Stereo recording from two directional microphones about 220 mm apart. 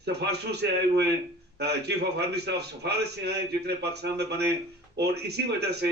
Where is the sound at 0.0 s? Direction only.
50° right (ahead or behind).